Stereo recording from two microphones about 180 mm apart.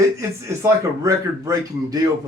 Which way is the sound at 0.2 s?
15° right (ahead or behind).